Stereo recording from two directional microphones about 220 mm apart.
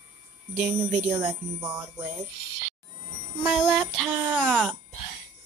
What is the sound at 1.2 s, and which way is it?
Speech, 10° right (ahead or behind).